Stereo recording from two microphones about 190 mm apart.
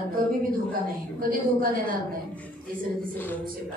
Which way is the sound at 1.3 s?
50° right (ahead or behind).